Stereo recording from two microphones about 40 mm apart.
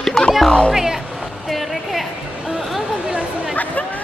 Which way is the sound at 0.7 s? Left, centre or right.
Centre.